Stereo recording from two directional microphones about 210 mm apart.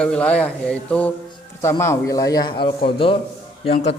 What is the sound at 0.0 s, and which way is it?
A man's voice, 5° left (ahead or behind).